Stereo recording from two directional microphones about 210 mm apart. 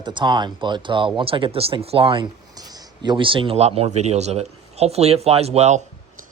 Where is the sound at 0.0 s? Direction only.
20° right (ahead or behind).